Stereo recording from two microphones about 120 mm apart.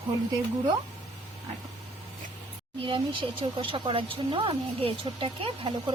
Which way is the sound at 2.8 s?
40° right (ahead or behind).